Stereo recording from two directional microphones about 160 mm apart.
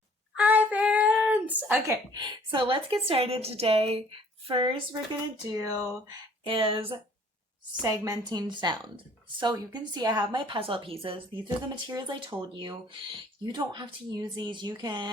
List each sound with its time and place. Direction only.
0.3 s a sound: 10° right (ahead or behind)
2.1 s a woman's voice: 30° right (ahead or behind)
5.5 s a woman's voice: 20° right (ahead or behind)
6.4 s a woman's voice: 35° right (ahead or behind)
7.8 s a woman's voice: 25° right (ahead or behind)